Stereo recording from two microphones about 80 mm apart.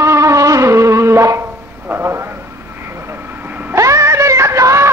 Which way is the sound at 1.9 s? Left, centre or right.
Right.